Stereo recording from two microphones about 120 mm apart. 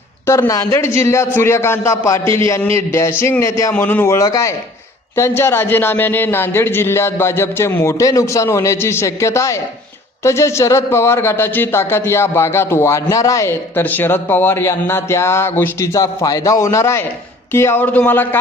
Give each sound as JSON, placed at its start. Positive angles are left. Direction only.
{"t": 0.3, "sound": "speech", "side_deg": 25}